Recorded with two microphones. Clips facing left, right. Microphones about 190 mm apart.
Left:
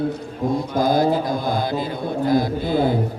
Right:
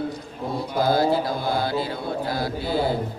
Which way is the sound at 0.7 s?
15° left (ahead or behind).